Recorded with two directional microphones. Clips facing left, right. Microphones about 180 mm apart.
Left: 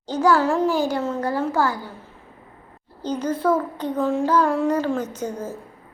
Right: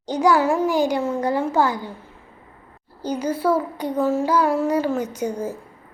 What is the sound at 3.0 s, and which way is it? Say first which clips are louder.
A child's voice: even; 10° right (ahead or behind).